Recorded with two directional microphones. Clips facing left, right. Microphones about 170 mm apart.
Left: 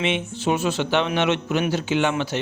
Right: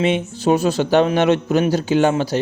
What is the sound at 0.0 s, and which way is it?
Speech, 40° right (ahead or behind).